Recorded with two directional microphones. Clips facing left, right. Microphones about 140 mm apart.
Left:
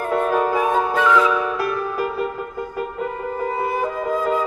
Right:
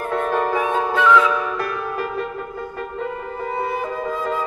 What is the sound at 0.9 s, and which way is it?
Music, 40° left (ahead or behind).